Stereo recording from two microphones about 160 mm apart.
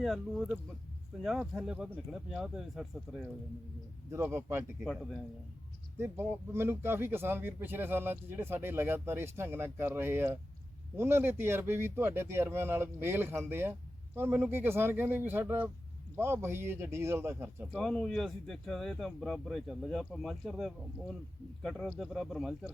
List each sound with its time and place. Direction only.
0.0 s speech: centre (ahead or behind)
4.1 s speech: 15° right (ahead or behind)
6.0 s speech: 15° right (ahead or behind)
17.7 s speech: 5° left (ahead or behind)